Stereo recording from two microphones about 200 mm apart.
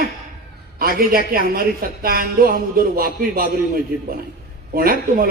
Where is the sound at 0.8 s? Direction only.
50° right (ahead or behind).